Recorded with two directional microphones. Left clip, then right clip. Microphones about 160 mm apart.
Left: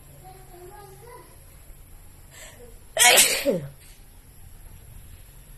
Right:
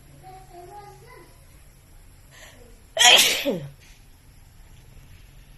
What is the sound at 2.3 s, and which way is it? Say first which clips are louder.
Sneeze: left 2 dB; 20° left (ahead or behind).